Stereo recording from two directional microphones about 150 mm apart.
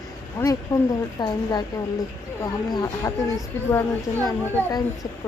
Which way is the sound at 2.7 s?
25° left (ahead or behind).